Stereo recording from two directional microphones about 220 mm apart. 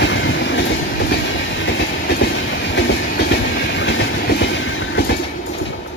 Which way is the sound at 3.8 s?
55° left (ahead or behind).